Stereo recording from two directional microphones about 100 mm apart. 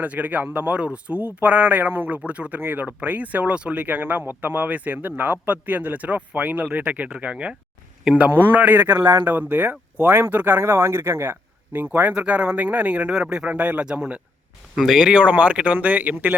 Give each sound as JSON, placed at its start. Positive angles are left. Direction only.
{"t": 0.0, "sound": "speech", "side_deg": -15}
{"t": 9.0, "sound": "speech", "side_deg": -50}
{"t": 9.2, "sound": "speech", "side_deg": -15}